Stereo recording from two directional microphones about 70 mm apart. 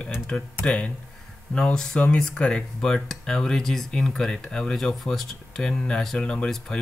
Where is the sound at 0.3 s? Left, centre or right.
Centre.